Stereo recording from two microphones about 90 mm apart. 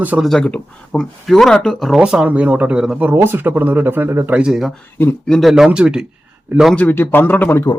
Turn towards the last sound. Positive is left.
turn(degrees=25)  # may be behind; listen again after turning